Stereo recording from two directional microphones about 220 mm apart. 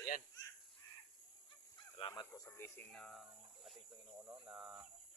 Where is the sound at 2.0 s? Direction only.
20° left (ahead or behind); by 3.8 s centre (ahead or behind).